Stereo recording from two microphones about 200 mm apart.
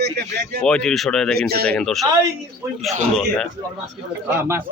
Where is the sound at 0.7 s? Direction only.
5° left (ahead or behind).